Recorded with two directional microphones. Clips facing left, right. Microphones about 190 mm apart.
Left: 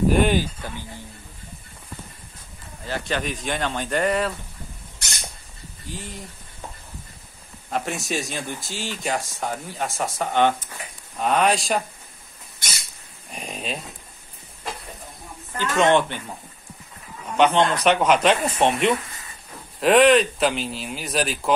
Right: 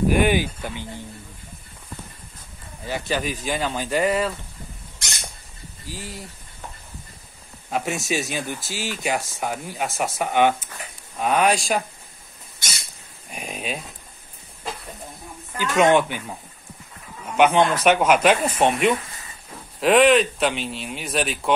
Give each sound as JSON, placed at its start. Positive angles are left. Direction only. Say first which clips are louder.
{"t": 0.3, "sound": "speech", "louder": "right 1 dB", "side_deg": -15}
{"t": 2.8, "sound": "speech", "louder": "right 1 dB", "side_deg": -10}
{"t": 5.9, "sound": "speech", "louder": "even", "side_deg": -5}
{"t": 7.7, "sound": "speech", "louder": "right 2 dB", "side_deg": -5}
{"t": 13.3, "sound": "a sound", "louder": "right 1 dB", "side_deg": -5}
{"t": 15.5, "sound": "speech", "louder": "right 1 dB", "side_deg": -10}
{"t": 17.4, "sound": "speech", "louder": "right 1 dB", "side_deg": -10}